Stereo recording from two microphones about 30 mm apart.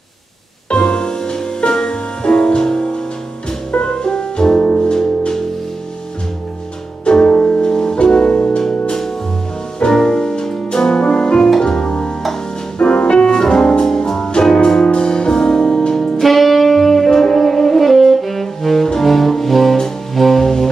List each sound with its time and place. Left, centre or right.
0.7 s music: left
7.1 s music: left
9.8 s music: left
13.3 s music: centre
16.2 s music: centre
18.9 s brass instrument: centre
20.2 s music: centre